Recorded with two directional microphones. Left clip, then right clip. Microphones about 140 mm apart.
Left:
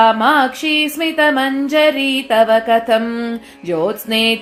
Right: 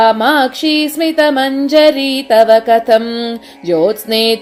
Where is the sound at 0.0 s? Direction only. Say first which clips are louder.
Right 2 dB; 45° right (ahead or behind).